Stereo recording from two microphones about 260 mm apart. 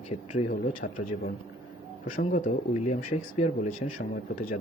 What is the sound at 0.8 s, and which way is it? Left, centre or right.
Speech, left.